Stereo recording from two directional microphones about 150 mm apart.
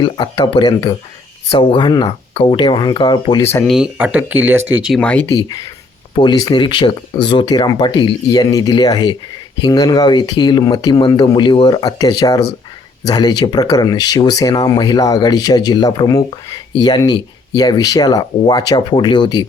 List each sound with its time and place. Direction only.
0.0 s speech: 30° left (ahead or behind)
3.9 s speech: 10° right (ahead or behind)
4.9 s speech: 10° left (ahead or behind)
5.3 s speech: 25° left (ahead or behind)